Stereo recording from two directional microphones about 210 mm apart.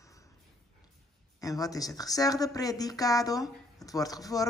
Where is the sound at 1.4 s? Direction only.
15° left (ahead or behind).